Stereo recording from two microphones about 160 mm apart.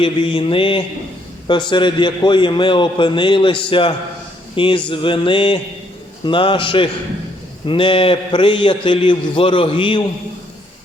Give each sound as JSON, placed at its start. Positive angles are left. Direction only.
{"t": 0.0, "sound": "a man's voice", "side_deg": 35}